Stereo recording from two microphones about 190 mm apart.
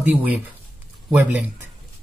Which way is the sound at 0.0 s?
10° right (ahead or behind).